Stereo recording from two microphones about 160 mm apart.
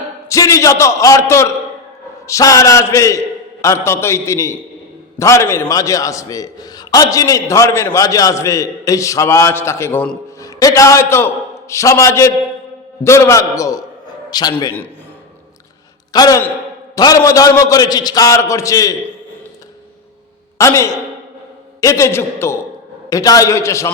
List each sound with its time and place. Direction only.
0.3 s a man's voice: 20° left (ahead or behind)
16.1 s a man's voice: 25° left (ahead or behind)
20.6 s a man's voice: 20° left (ahead or behind)